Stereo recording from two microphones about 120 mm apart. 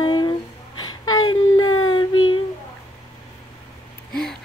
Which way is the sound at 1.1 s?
35° left (ahead or behind).